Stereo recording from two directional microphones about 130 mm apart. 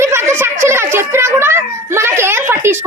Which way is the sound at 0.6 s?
20° right (ahead or behind).